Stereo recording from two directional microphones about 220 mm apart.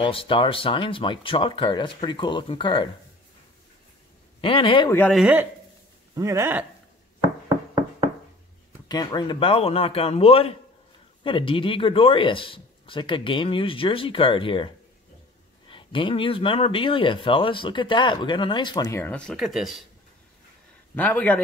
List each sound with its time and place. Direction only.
0.0 s speech: 25° left (ahead or behind)
4.4 s speech: 25° left (ahead or behind)
4.9 s a man's voice: 5° left (ahead or behind)
5.2 s speech: 10° right (ahead or behind)
7.2 s a sound: 15° right (ahead or behind)
8.8 s speech: 20° left (ahead or behind)
15.7 s speech: 25° left (ahead or behind); by 19.8 s centre (ahead or behind)
20.9 s a man's voice: 10° left (ahead or behind)